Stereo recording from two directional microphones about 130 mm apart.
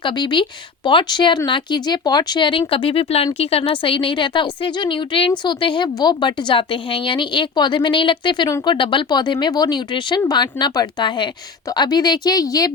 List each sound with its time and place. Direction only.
0.0 s a woman's voice: 35° left (ahead or behind)